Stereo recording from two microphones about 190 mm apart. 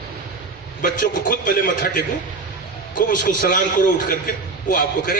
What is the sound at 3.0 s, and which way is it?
A man's voice, 45° left (ahead or behind).